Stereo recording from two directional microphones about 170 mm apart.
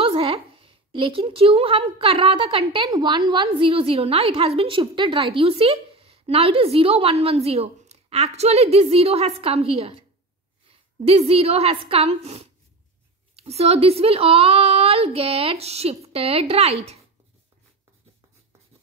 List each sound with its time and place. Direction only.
0.0 s a woman's voice: 35° right (ahead or behind)